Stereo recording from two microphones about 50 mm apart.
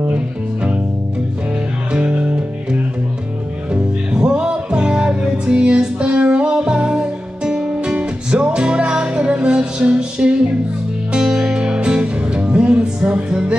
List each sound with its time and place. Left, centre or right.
1.9 s music: right
3.7 s music: centre